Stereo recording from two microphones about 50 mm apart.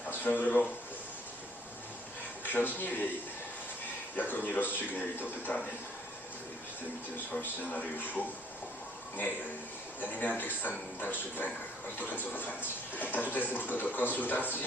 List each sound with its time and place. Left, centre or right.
0.1 s speech: left
2.4 s speech: left
4.2 s a man's voice: left
7.7 s a man's voice: left
10.0 s a man's voice: left